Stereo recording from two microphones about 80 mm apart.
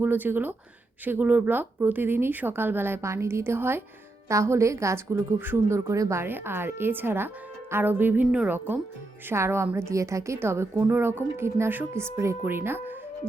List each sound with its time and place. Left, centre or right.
0.0 s a woman's voice: right